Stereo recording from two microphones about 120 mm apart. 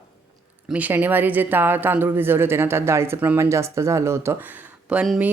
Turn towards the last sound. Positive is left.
turn(degrees=-10)  # may be behind; listen again after turning